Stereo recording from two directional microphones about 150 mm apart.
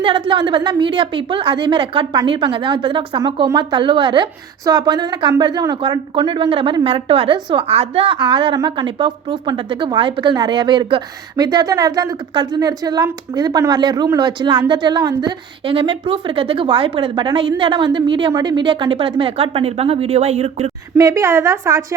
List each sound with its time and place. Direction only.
0.0 s a woman's voice: 35° right (ahead or behind)
20.9 s a woman's voice: 20° right (ahead or behind)